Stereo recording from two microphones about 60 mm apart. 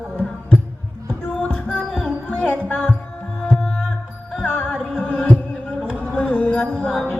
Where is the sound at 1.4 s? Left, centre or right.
Left.